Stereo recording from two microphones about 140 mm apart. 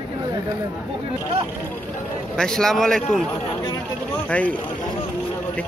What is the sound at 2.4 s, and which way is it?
Speech, 5° left (ahead or behind).